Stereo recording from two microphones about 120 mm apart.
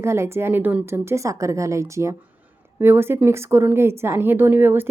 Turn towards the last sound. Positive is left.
turn(degrees=-20)  # may be behind; listen again after turning